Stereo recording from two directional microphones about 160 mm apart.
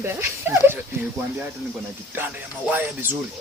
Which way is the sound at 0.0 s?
15° right (ahead or behind).